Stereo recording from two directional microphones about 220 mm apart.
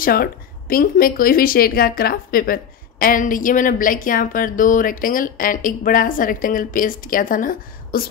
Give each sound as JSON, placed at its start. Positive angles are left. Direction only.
{"t": 0.0, "sound": "a woman's voice", "side_deg": 40}